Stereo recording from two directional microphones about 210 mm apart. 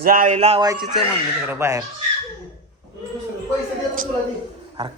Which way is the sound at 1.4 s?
10° right (ahead or behind).